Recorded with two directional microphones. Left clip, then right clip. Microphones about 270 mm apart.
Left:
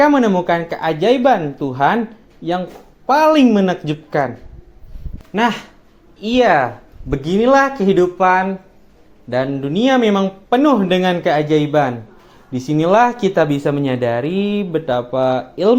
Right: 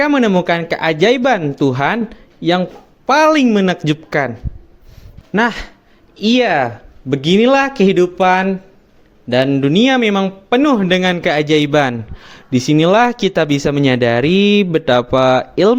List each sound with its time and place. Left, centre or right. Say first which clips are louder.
0.0 s speech: left 1 dB; right
5.3 s speech: right 2 dB; right